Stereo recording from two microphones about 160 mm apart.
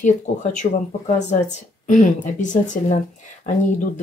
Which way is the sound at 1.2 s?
45° left (ahead or behind).